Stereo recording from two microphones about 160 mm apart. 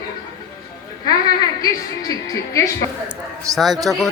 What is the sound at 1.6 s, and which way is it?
Speech, 20° left (ahead or behind).